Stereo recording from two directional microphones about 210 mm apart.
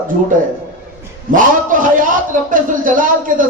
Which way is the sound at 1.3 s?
40° right (ahead or behind).